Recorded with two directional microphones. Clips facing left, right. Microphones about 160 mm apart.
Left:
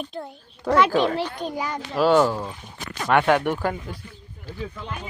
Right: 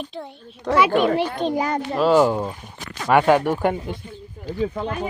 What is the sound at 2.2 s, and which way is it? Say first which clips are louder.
Speech: right 4 dB; 20° right (ahead or behind).